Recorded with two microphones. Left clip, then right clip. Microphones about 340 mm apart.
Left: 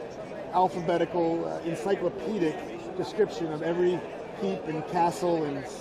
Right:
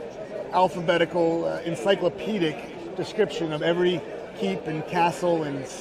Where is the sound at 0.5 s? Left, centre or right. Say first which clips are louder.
Right 4 dB; centre.